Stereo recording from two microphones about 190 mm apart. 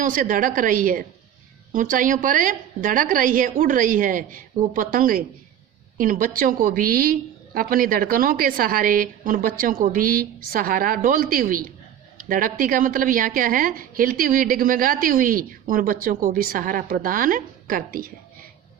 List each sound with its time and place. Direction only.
0.0 s a woman's voice: 45° right (ahead or behind)